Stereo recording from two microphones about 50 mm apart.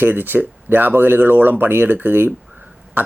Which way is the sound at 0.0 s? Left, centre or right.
Right.